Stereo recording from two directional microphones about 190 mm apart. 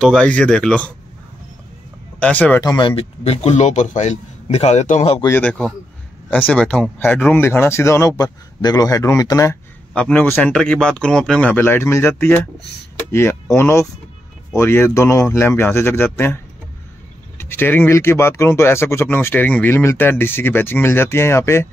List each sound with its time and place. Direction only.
0.0 s speech: 5° left (ahead or behind)
2.1 s speech: 5° left (ahead or behind)
2.6 s speech: 20° left (ahead or behind)
3.0 s a man's voice: 30° left (ahead or behind)
5.2 s speech: 10° left (ahead or behind)
9.9 s speech: 5° left (ahead or behind)
17.4 s speech: 10° left (ahead or behind)